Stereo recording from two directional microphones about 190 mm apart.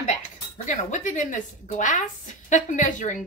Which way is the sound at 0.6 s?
40° left (ahead or behind).